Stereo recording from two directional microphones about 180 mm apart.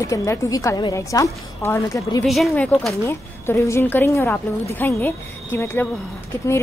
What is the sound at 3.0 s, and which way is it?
A woman's voice, 15° left (ahead or behind).